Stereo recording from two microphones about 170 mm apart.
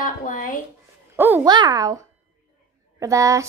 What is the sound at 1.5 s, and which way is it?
Speech, 25° right (ahead or behind).